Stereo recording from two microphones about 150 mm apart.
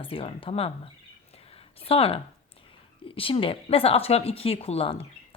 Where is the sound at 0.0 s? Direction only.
35° left (ahead or behind).